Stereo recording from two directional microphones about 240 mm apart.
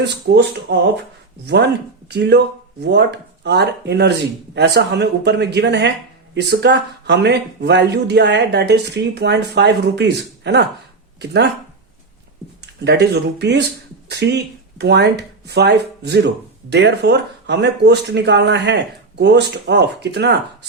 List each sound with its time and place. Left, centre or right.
0.0 s speech: right
12.8 s speech: right